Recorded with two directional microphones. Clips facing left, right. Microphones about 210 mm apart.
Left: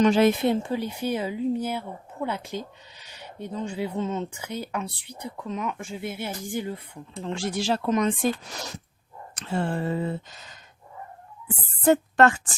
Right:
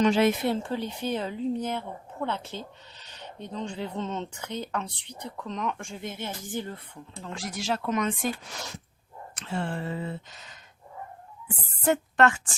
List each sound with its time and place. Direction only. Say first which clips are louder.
0.0 s speech: left 3 dB; 40° left (ahead or behind)
0.4 s speech: left 4 dB; 15° left (ahead or behind)
7.3 s speech: left 5 dB; 30° left (ahead or behind)
11.9 s speech: left 4 dB; 35° left (ahead or behind)